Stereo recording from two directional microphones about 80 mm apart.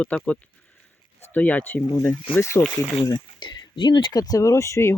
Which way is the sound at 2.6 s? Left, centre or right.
Left.